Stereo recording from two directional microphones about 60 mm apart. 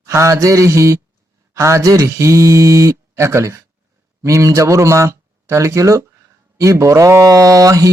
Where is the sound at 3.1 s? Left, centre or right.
Right.